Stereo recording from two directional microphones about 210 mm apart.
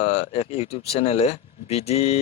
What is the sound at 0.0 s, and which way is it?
Speech, 30° left (ahead or behind).